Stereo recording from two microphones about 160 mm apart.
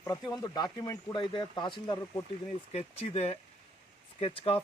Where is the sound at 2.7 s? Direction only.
40° left (ahead or behind).